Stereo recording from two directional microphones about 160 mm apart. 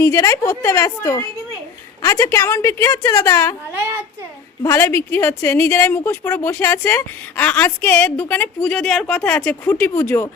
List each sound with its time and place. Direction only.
0.0 s speech: 20° left (ahead or behind)
4.6 s a woman's voice: 15° left (ahead or behind)